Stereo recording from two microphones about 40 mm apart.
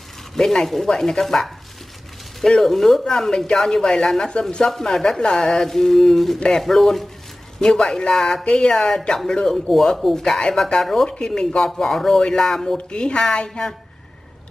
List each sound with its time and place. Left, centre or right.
0.4 s speech: centre
2.6 s speech: centre; by 4.6 s left
4.6 s speech: centre
9.7 s speech: centre
11.1 s speech: centre
11.7 s speech: centre
12.2 s speech: centre
12.7 s speech: left